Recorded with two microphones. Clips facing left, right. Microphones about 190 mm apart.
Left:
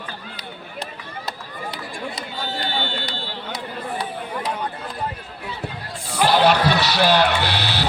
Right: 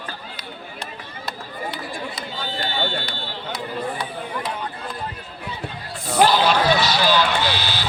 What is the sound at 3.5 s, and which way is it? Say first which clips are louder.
Speech: right 2 dB; 40° left (ahead or behind).